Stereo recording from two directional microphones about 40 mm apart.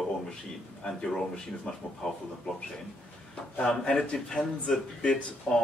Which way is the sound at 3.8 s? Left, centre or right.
Left.